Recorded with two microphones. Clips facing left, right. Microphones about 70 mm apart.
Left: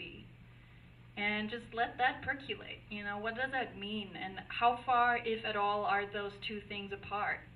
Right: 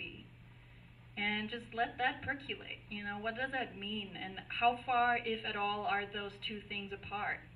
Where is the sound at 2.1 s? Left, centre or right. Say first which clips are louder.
Left 2 dB; centre.